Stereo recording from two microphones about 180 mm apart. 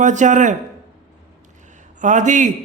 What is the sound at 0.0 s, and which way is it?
Speech, 45° right (ahead or behind).